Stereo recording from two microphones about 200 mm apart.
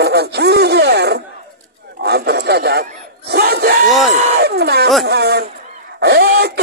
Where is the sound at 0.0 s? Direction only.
55° right (ahead or behind).